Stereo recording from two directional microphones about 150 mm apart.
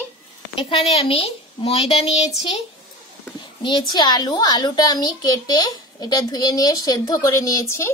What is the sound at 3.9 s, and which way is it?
A child's voice, 25° left (ahead or behind).